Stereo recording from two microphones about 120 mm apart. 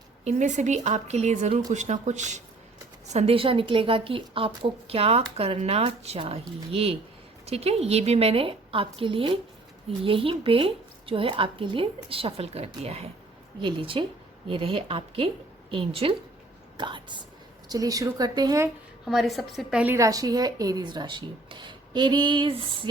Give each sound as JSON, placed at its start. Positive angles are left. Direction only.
{"t": 0.3, "sound": "speech", "side_deg": -85}
{"t": 3.1, "sound": "a woman's voice", "side_deg": -60}
{"t": 13.6, "sound": "a woman's voice", "side_deg": -45}
{"t": 16.7, "sound": "speech", "side_deg": -40}
{"t": 17.7, "sound": "speech", "side_deg": -30}
{"t": 19.0, "sound": "a woman's voice", "side_deg": 0}
{"t": 20.0, "sound": "speech", "side_deg": -30}